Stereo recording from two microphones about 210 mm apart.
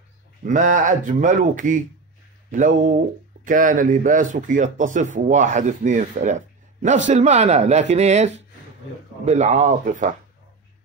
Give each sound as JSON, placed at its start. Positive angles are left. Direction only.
{"t": 0.5, "sound": "speech", "side_deg": -40}